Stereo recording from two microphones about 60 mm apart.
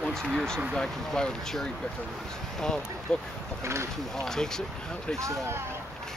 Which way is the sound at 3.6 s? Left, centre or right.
Right.